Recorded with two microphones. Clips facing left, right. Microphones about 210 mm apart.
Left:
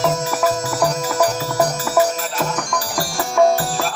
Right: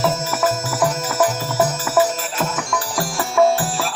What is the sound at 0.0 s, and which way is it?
Music, centre (ahead or behind).